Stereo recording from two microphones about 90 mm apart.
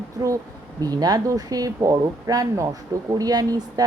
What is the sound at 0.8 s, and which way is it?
Speech, 45° right (ahead or behind).